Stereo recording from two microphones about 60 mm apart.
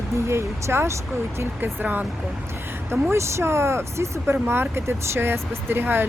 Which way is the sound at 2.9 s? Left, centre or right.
Right.